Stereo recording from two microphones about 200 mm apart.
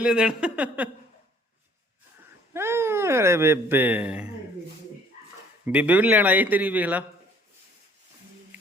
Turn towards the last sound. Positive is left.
turn(degrees=-10)  # may be behind; listen again after turning